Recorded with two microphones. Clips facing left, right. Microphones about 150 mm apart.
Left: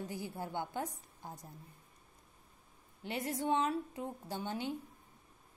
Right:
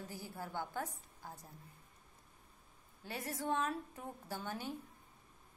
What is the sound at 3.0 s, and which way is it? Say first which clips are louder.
A woman's voice: left 4 dB; 20° left (ahead or behind).